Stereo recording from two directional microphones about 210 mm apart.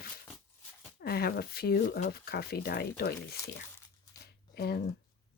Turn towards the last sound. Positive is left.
turn(degrees=50)  # may be behind; listen again after turning